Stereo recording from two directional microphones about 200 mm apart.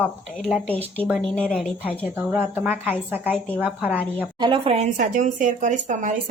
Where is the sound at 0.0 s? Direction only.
5° left (ahead or behind).